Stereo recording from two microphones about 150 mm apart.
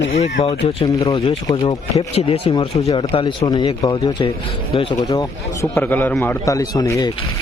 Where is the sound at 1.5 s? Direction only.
25° left (ahead or behind).